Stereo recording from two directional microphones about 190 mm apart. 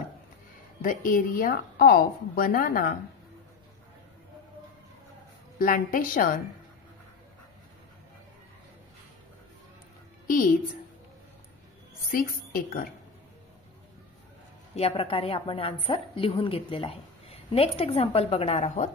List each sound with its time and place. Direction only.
0.8 s a woman's voice: 45° left (ahead or behind)
5.6 s a woman's voice: 50° left (ahead or behind)
10.2 s a woman's voice: 45° left (ahead or behind)
14.8 s a woman's voice: 30° left (ahead or behind)